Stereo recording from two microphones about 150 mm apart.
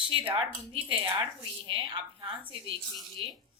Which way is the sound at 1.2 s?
35° right (ahead or behind).